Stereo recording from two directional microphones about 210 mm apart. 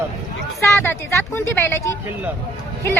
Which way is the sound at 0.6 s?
10° left (ahead or behind).